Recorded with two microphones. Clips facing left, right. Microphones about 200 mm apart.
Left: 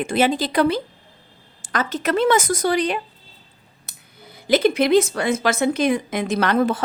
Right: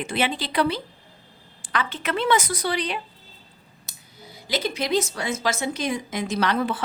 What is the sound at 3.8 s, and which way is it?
Speech, 55° left (ahead or behind).